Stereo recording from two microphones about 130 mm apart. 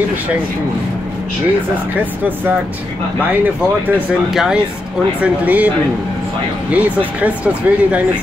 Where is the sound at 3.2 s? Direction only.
15° right (ahead or behind).